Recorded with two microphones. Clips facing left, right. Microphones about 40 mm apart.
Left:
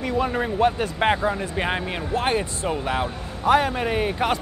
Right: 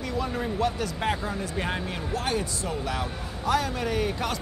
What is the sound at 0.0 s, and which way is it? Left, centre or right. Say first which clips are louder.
Speech: left 6 dB; left.